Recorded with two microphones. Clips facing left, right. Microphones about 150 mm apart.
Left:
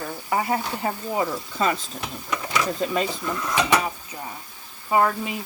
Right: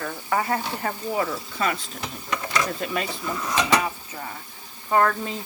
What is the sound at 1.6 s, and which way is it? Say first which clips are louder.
Speech: left 3 dB; 30° left (ahead or behind).